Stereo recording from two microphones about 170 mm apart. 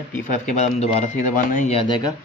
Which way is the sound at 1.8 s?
25° left (ahead or behind).